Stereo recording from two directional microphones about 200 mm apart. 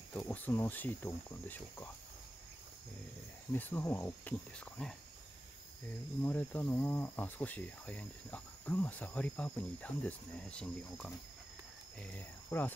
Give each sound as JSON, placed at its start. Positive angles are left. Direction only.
{"t": 0.1, "sound": "speech", "side_deg": 5}
{"t": 3.5, "sound": "speech", "side_deg": 10}
{"t": 6.2, "sound": "speech", "side_deg": 10}